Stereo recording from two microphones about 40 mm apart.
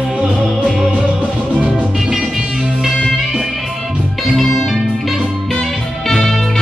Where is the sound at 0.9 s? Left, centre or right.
Right.